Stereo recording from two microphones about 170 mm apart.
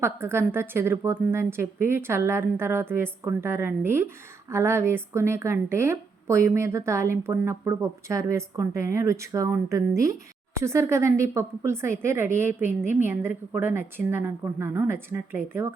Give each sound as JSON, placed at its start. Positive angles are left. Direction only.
{"t": 0.0, "sound": "a woman's voice", "side_deg": -15}